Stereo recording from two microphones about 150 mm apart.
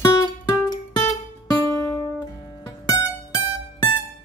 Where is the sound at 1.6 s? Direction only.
20° left (ahead or behind).